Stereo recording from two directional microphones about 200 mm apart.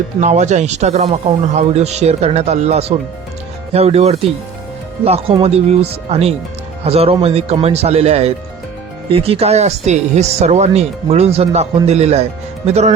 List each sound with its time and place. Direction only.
0.2 s speech: 35° right (ahead or behind)